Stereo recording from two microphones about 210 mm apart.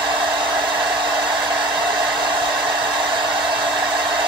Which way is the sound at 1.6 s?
20° right (ahead or behind).